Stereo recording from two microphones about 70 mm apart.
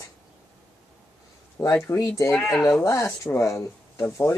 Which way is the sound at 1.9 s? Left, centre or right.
Left.